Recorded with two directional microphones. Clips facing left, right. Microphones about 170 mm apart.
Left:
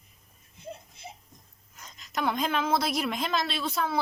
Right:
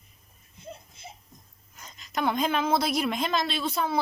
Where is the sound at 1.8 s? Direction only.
Centre (ahead or behind).